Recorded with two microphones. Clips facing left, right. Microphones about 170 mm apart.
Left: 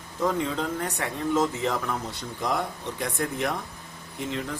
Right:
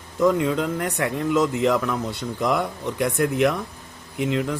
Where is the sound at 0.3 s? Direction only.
75° right (ahead or behind).